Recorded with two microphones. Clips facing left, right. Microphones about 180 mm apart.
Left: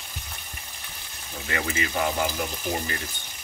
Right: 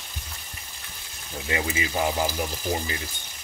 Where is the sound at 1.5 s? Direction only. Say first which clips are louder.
Right 1 dB; 20° right (ahead or behind).